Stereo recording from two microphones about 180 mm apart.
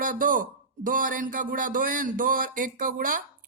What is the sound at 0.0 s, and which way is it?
A man's voice, 50° right (ahead or behind).